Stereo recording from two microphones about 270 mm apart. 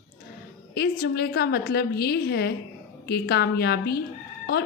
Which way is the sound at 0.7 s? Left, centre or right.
Left.